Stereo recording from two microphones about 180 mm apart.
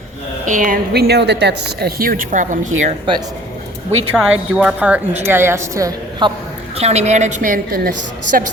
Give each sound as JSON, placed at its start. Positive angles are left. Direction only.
{"t": 0.4, "sound": "a woman's voice", "side_deg": -45}
{"t": 4.1, "sound": "a woman's voice", "side_deg": -5}
{"t": 6.7, "sound": "a woman's voice", "side_deg": -35}